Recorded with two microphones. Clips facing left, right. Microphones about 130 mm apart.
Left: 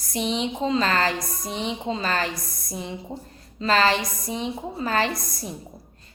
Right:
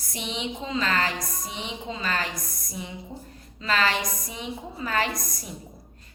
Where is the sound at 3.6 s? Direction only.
35° left (ahead or behind).